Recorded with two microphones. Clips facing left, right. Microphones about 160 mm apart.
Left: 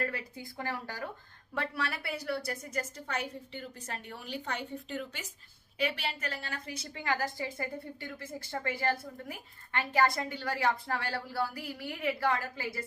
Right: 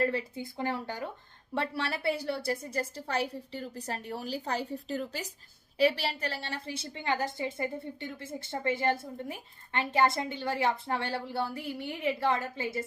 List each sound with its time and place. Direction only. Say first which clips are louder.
0.0 s a woman's voice: right 7 dB; 25° right (ahead or behind)